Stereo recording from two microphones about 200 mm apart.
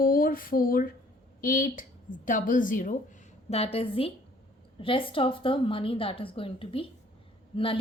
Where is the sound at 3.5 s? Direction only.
30° left (ahead or behind).